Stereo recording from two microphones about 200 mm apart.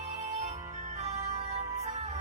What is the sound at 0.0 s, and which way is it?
Music, 35° right (ahead or behind).